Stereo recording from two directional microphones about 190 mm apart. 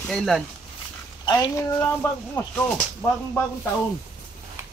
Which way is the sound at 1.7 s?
10° left (ahead or behind).